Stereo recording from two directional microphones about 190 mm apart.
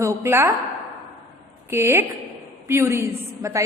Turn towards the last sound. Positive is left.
turn(degrees=-15)  # may be behind; listen again after turning